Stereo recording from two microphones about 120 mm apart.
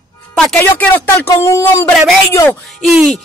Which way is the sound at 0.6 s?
15° left (ahead or behind).